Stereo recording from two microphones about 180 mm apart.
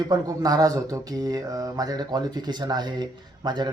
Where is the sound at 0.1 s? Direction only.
20° right (ahead or behind).